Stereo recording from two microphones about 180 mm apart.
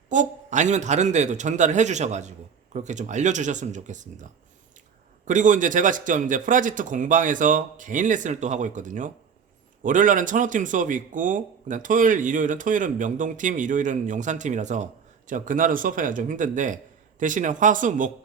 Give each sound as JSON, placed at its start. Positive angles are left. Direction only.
{"t": 0.1, "sound": "a man's voice", "side_deg": -45}